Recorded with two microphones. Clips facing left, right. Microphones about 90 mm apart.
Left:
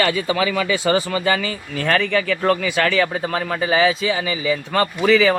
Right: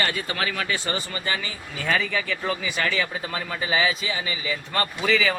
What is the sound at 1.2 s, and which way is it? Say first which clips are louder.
Speech: left 9 dB; 90° left.